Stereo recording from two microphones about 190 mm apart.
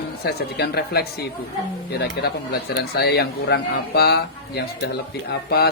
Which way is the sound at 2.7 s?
60° left (ahead or behind).